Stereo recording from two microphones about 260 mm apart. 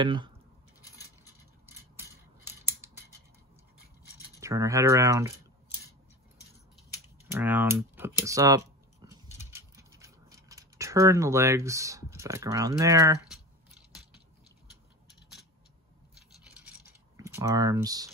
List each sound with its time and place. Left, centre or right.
0.0 s speech: centre
1.7 s scissors: centre
4.4 s speech: centre
7.2 s speech: centre
9.4 s scissors: centre
17.2 s speech: centre